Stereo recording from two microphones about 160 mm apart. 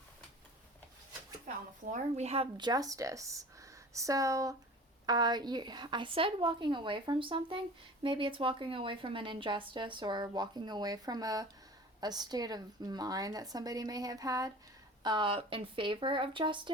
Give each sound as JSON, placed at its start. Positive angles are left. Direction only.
{"t": 1.9, "sound": "a woman's voice", "side_deg": -45}